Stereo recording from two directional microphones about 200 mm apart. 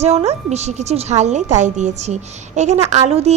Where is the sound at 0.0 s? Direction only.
30° right (ahead or behind).